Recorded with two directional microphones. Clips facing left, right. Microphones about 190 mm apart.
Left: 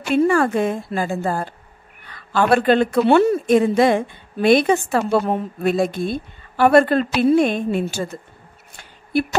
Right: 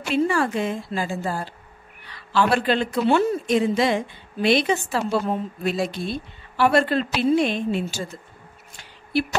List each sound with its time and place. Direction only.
0.1 s speech: 50° left (ahead or behind)